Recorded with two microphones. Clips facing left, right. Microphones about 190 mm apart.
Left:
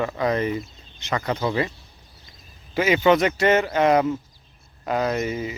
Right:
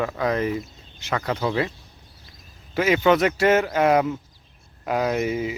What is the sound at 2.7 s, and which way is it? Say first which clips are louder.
Speech: even; centre (ahead or behind).